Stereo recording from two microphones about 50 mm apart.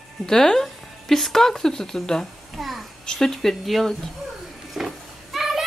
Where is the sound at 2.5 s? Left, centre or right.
Centre.